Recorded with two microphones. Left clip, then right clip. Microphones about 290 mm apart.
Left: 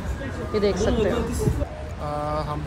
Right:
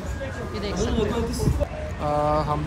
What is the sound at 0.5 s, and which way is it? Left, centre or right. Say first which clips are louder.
Mantra: left 5 dB; centre.